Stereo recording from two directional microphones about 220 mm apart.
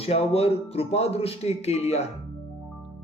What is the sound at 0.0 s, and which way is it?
Speech, 25° left (ahead or behind).